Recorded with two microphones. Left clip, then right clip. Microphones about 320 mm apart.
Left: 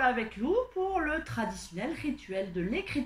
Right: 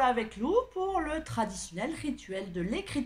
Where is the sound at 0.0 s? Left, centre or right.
Right.